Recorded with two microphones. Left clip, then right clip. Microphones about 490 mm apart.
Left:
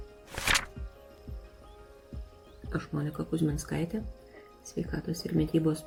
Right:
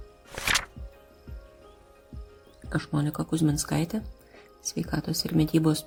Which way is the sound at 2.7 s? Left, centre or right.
Centre.